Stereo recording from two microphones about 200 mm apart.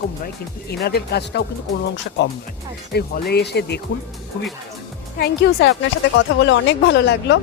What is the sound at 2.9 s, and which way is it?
Speech, 55° left (ahead or behind).